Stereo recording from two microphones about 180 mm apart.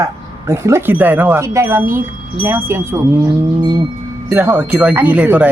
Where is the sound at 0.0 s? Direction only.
15° right (ahead or behind).